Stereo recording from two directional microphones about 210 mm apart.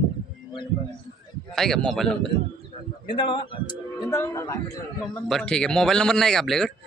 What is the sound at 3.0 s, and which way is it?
Speech, 25° left (ahead or behind).